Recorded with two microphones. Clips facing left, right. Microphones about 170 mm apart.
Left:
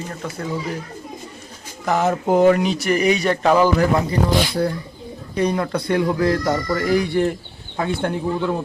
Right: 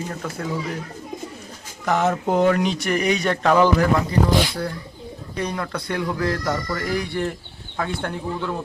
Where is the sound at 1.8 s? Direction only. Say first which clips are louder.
Left 1 dB; 5° left (ahead or behind).